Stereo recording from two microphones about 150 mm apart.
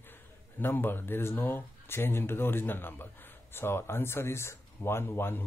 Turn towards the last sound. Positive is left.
turn(degrees=15)  # may be behind; listen again after turning